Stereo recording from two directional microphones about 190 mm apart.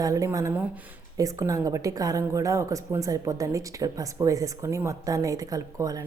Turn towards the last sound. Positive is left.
turn(degrees=-20)  # may be behind; listen again after turning